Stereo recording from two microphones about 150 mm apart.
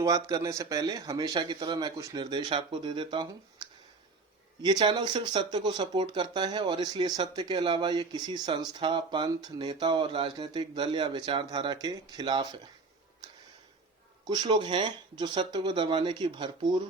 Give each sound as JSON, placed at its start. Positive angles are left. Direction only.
{"t": 0.0, "sound": "speech", "side_deg": -25}
{"t": 14.3, "sound": "speech", "side_deg": -30}